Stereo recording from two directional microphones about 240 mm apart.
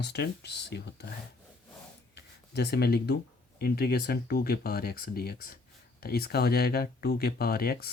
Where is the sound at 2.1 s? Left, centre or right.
Left.